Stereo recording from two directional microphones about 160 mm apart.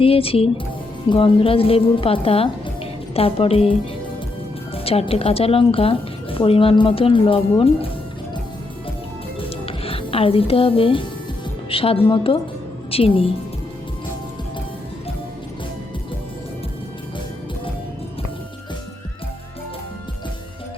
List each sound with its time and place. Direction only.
0.0 s a woman's voice: 35° left (ahead or behind)
4.7 s speech: 35° left (ahead or behind)
9.4 s music: 35° left (ahead or behind)
11.7 s a woman's voice: 35° left (ahead or behind)